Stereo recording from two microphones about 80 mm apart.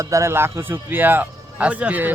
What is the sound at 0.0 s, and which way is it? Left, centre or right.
Speech, right.